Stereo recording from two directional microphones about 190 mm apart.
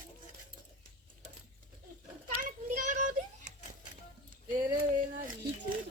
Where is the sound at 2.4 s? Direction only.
45° right (ahead or behind).